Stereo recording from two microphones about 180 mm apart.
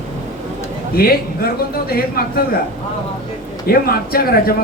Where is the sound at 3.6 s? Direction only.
55° left (ahead or behind).